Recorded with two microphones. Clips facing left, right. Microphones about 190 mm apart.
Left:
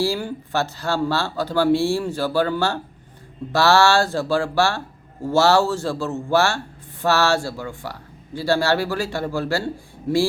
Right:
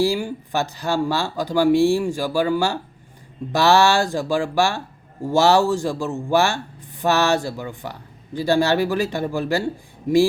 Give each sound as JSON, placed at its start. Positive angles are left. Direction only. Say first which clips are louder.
{"t": 0.0, "sound": "speech", "louder": "right 2 dB", "side_deg": -15}